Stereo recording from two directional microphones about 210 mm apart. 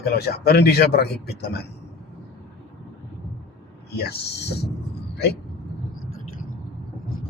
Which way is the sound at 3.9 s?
50° left (ahead or behind).